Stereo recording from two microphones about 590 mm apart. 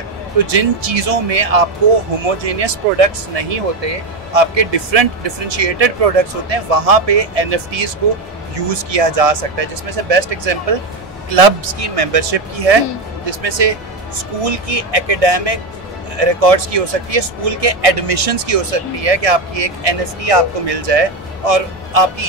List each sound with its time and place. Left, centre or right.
0.5 s speech: right